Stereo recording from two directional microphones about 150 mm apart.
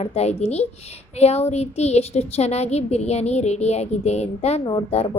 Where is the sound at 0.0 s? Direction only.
45° left (ahead or behind).